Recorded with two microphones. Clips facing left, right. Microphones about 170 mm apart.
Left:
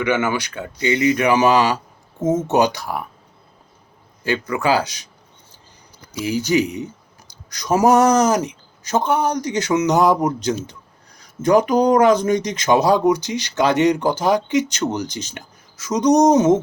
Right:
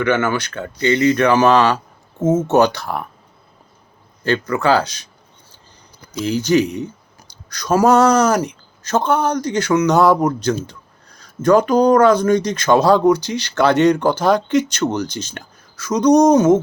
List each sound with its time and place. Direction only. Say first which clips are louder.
0.0 s speech: right 2 dB; 15° left (ahead or behind)
4.2 s speech: right 3 dB; 15° left (ahead or behind)
6.1 s speech: right 3 dB; 10° left (ahead or behind)
10.7 s a sound: right 2 dB; 15° left (ahead or behind)
11.4 s speech: right 2 dB; 15° left (ahead or behind)